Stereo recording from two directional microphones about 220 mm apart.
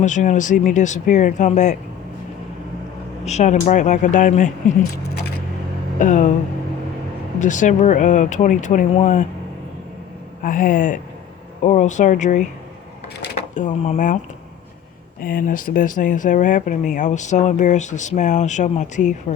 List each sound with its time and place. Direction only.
0.0 s speech: 35° left (ahead or behind)
3.2 s speech: 30° left (ahead or behind)
7.3 s speech: 35° left (ahead or behind)
10.4 s speech: 35° left (ahead or behind)
15.2 s speech: 40° left (ahead or behind)